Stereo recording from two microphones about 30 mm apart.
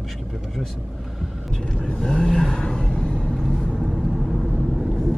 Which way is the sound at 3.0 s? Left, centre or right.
Left.